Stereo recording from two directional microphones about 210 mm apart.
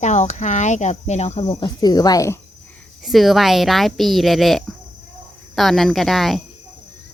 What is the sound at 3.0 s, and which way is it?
A woman's voice, centre (ahead or behind).